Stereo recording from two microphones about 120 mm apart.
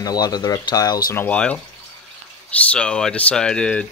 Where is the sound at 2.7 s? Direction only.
5° left (ahead or behind).